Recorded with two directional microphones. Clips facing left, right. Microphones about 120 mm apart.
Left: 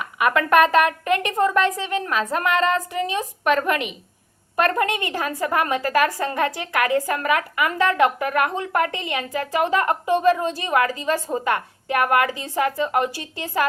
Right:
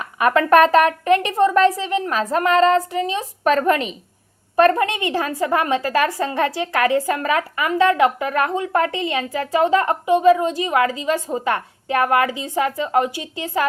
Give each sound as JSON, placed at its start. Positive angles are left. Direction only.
{"t": 0.0, "sound": "a woman's voice", "side_deg": -30}